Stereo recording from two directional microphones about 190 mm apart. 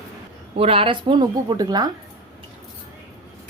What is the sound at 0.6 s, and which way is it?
A woman's voice, 30° right (ahead or behind).